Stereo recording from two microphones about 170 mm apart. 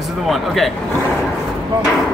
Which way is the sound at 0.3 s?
Centre (ahead or behind).